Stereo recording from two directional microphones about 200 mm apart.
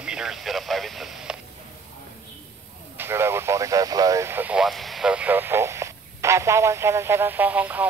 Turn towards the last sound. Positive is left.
turn(degrees=-10)  # may be behind; listen again after turning